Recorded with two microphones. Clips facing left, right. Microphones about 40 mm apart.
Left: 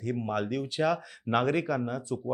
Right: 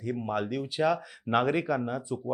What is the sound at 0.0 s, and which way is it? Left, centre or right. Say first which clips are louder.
Speech: even; centre.